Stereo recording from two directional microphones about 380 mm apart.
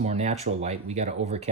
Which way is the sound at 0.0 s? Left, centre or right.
Centre.